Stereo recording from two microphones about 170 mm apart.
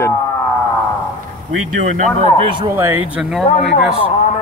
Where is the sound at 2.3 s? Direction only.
30° right (ahead or behind).